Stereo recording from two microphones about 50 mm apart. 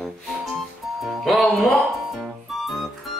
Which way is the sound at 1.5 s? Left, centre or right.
Centre.